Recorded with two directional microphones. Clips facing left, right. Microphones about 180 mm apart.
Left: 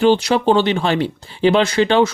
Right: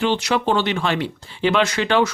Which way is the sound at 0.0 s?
35° left (ahead or behind).